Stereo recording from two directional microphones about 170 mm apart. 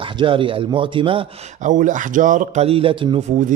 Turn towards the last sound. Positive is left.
turn(degrees=-30)  # may be behind; listen again after turning